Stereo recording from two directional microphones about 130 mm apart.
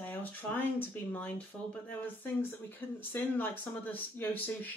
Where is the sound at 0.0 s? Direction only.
15° left (ahead or behind).